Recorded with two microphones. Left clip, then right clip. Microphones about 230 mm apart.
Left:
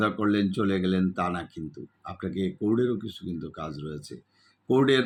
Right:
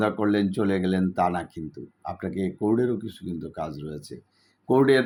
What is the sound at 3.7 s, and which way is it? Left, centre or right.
Speech, centre.